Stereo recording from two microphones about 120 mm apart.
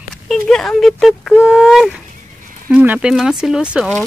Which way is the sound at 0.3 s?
5° left (ahead or behind).